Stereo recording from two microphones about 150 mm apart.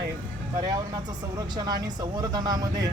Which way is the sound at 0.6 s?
30° right (ahead or behind).